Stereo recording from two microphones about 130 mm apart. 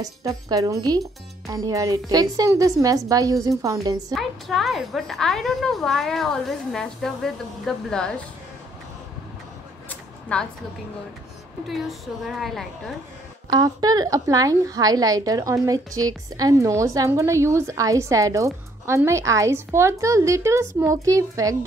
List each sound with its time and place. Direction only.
0.0 s a woman's voice: 25° right (ahead or behind)
4.1 s a woman's voice: centre (ahead or behind)
10.3 s a woman's voice: 10° left (ahead or behind)
12.2 s a woman's voice: centre (ahead or behind)
13.5 s a woman's voice: 30° right (ahead or behind)